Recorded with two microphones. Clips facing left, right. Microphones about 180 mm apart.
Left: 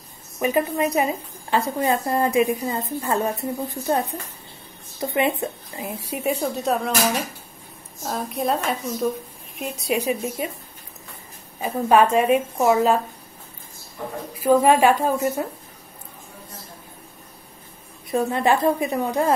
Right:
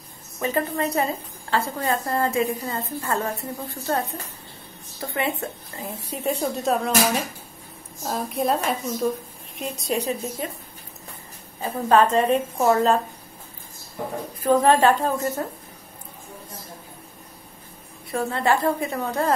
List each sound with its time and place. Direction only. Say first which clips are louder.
0.4 s a woman's voice: left 3 dB; 15° left (ahead or behind)
8.0 s a woman's voice: right 1 dB; centre (ahead or behind)
11.6 s a woman's voice: left 1 dB; 10° left (ahead or behind)
14.4 s a woman's voice: left 1 dB; 10° left (ahead or behind)
18.1 s a woman's voice: left 2 dB; 15° left (ahead or behind)